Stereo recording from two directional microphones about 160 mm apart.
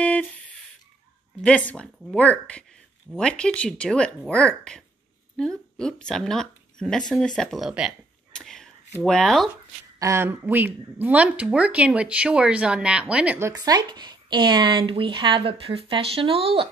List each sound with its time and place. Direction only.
0.0 s a sound: 10° left (ahead or behind)
1.4 s a woman's voice: 10° left (ahead or behind)
9.9 s speech: 20° right (ahead or behind)
13.5 s speech: 25° right (ahead or behind)